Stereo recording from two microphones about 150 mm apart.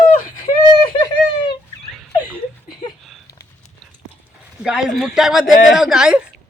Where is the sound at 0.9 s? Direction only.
30° left (ahead or behind).